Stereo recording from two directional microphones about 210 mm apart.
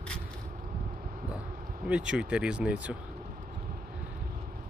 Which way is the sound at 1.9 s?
5° right (ahead or behind).